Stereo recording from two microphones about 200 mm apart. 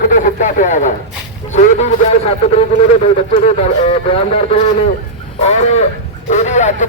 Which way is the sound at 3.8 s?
30° left (ahead or behind).